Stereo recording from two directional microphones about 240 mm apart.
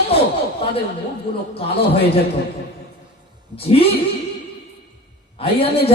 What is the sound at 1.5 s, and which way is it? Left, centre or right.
Speech, left.